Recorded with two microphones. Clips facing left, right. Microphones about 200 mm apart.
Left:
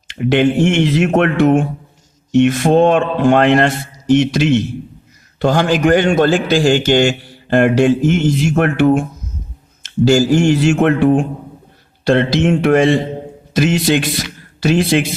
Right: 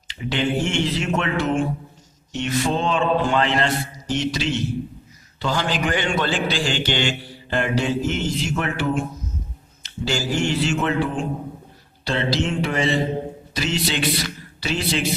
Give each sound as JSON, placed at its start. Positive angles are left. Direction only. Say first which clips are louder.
{"t": 0.2, "sound": "a man's voice", "louder": "left 10 dB", "side_deg": 55}
{"t": 9.8, "sound": "a man's voice", "louder": "left 13 dB", "side_deg": 45}